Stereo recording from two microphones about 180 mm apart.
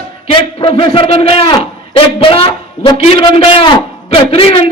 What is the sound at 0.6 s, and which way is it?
A man's voice, 30° left (ahead or behind).